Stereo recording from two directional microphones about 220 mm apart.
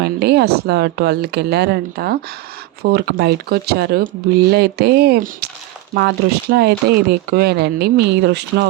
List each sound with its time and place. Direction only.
0.0 s speech: 50° right (ahead or behind)